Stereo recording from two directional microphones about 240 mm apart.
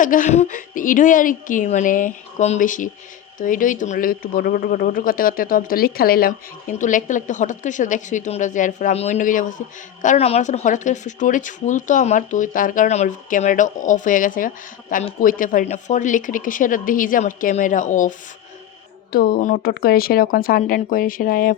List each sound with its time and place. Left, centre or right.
0.0 s speech: left
19.1 s speech: left